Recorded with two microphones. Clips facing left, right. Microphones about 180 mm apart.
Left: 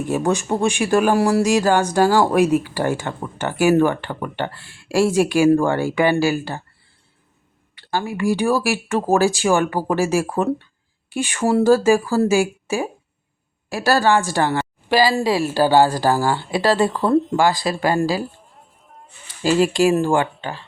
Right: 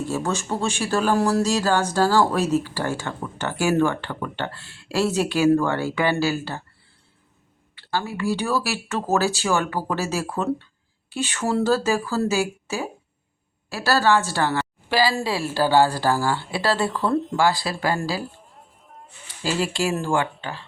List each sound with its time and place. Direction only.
0.0 s speech: 15° left (ahead or behind)
7.8 s speech: 15° left (ahead or behind)
16.9 s speech: 40° left (ahead or behind)
17.3 s speech: 15° left (ahead or behind)
19.5 s speech: 15° left (ahead or behind)